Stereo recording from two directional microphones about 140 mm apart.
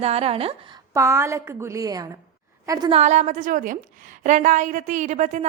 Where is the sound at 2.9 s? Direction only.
55° right (ahead or behind).